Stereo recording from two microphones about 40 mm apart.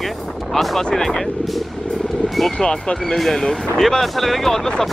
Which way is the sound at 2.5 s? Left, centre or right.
Left.